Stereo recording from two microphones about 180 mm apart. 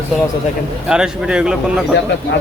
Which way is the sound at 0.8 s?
5° right (ahead or behind).